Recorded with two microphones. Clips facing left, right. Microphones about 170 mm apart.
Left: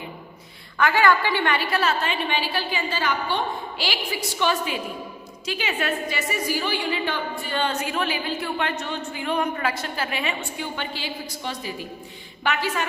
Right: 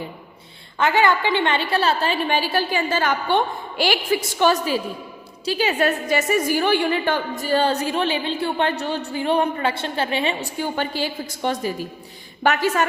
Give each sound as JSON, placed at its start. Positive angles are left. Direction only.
{"t": 0.8, "sound": "a woman's voice", "side_deg": -20}
{"t": 10.6, "sound": "a woman's voice", "side_deg": -45}